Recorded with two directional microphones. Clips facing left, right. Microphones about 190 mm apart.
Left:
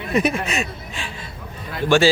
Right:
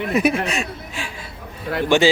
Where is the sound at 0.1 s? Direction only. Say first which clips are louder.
Even; 5° right (ahead or behind).